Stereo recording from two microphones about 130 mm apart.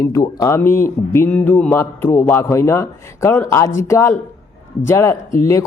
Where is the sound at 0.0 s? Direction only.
25° left (ahead or behind).